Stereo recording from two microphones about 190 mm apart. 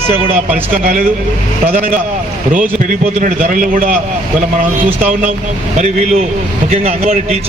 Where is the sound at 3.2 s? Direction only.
45° right (ahead or behind).